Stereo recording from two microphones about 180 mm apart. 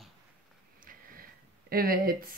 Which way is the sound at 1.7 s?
55° right (ahead or behind).